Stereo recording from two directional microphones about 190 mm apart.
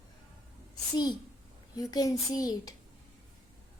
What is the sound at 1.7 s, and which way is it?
A child's voice, 20° left (ahead or behind).